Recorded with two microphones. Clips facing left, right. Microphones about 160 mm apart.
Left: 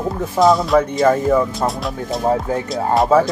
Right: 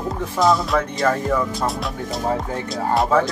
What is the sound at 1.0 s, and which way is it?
Speech, 15° left (ahead or behind).